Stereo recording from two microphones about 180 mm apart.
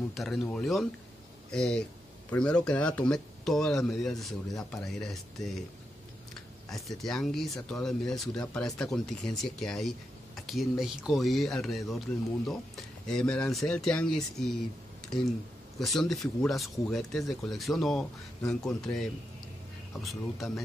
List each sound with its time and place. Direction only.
0.1 s speech: centre (ahead or behind)
6.7 s speech: centre (ahead or behind)
15.8 s speech: centre (ahead or behind)
20.0 s speech: centre (ahead or behind)